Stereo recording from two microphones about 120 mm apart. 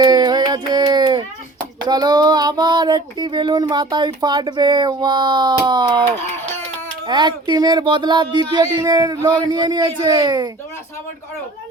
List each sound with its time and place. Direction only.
0.0 s a sound: 35° right (ahead or behind)
1.8 s child singing: 35° right (ahead or behind)
7.1 s child singing: 35° right (ahead or behind)